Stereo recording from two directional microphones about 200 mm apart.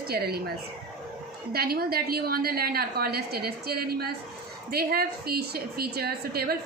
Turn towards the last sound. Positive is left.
turn(degrees=-50)  # may be behind; listen again after turning